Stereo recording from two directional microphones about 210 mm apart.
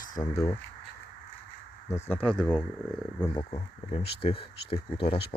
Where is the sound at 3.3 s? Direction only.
20° left (ahead or behind).